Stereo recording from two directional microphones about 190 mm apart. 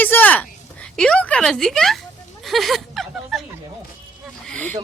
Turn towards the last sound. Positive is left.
turn(degrees=5)  # may be behind; listen again after turning